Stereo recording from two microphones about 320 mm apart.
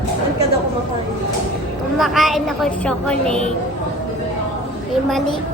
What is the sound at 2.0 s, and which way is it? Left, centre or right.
A woman's voice, centre.